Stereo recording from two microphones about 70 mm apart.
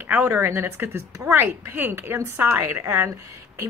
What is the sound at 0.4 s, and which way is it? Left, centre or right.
Speech, right.